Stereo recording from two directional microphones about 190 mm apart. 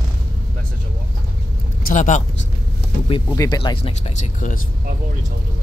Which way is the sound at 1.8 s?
40° left (ahead or behind).